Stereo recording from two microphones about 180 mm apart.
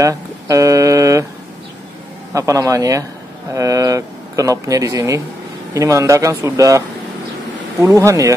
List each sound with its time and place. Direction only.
0.0 s speech: 15° right (ahead or behind)
2.3 s speech: 15° right (ahead or behind)
7.8 s speech: 15° right (ahead or behind)